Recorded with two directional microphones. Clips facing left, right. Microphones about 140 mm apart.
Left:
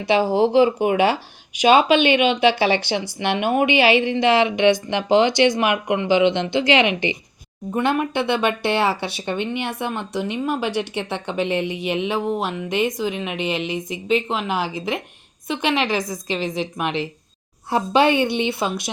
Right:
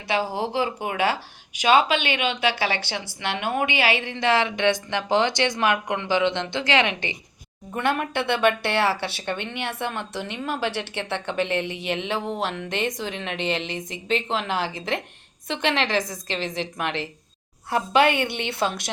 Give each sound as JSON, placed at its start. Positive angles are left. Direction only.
{"t": 0.0, "sound": "a woman's voice", "side_deg": 20}